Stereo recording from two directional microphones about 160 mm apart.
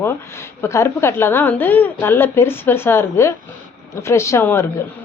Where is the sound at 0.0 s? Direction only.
15° left (ahead or behind).